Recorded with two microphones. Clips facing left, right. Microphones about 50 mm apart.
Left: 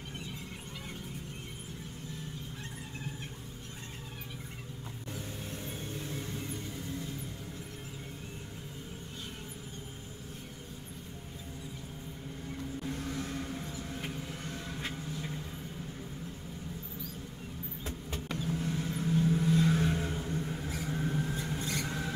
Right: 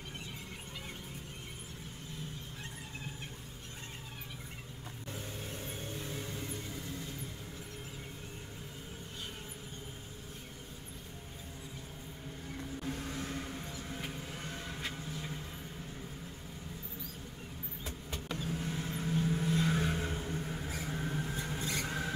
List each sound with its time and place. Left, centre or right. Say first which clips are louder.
5.1 s vehicle: left 1 dB; centre
12.8 s vehicle: left 1 dB; centre
14.4 s vehicle: left 2 dB; centre
18.4 s vehicle: left 5 dB; centre
20.9 s vehicle: left 5 dB; centre
21.8 s a sound: left 1 dB; centre